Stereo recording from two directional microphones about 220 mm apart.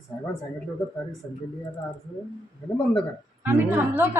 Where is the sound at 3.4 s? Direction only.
10° right (ahead or behind).